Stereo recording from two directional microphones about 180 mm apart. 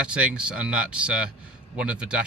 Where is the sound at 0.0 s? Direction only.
5° right (ahead or behind).